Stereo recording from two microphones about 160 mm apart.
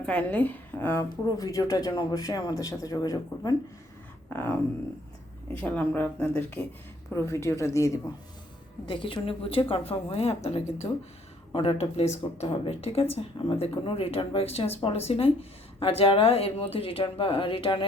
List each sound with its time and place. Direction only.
0.0 s a woman's voice: 5° left (ahead or behind); by 3.5 s 25° left (ahead or behind)
4.3 s a woman's voice: 10° left (ahead or behind)
8.9 s speech: 30° left (ahead or behind)